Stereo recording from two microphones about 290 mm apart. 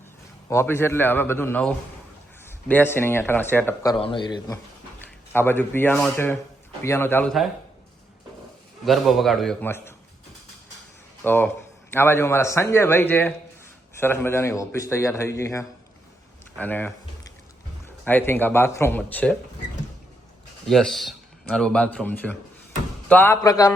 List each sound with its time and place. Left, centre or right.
0.4 s speech: centre
3.9 s speech: centre
8.8 s a man's voice: centre
11.2 s speech: centre
16.6 s a sound: centre
17.8 s speech: centre
20.7 s a man's voice: centre